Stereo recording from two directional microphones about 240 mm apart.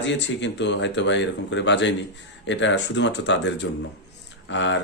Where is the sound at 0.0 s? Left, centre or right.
Left.